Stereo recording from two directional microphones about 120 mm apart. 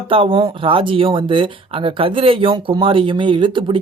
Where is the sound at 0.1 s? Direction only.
50° right (ahead or behind).